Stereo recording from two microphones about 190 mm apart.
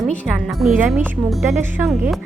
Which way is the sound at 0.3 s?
Centre (ahead or behind).